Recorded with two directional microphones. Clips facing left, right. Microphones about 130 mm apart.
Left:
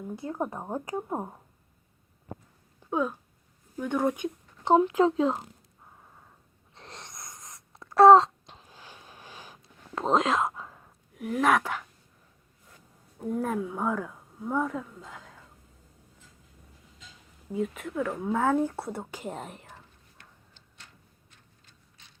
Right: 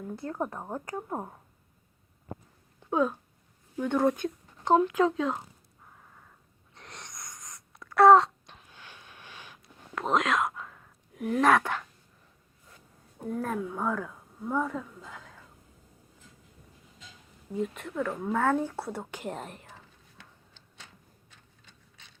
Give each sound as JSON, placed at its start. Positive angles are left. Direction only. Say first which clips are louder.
{"t": 0.0, "sound": "a woman's voice", "louder": "left 1 dB", "side_deg": 10}
{"t": 2.8, "sound": "a woman's voice", "louder": "right 2 dB", "side_deg": 0}
{"t": 4.6, "sound": "speech", "louder": "left 2 dB", "side_deg": 25}
{"t": 6.7, "sound": "wail", "louder": "left 1 dB", "side_deg": 25}
{"t": 10.0, "sound": "speech", "louder": "left 2 dB", "side_deg": 25}
{"t": 11.1, "sound": "speech", "louder": "right 1 dB", "side_deg": 0}
{"t": 13.3, "sound": "speech", "louder": "left 2 dB", "side_deg": 5}
{"t": 17.5, "sound": "speech", "louder": "left 2 dB", "side_deg": 5}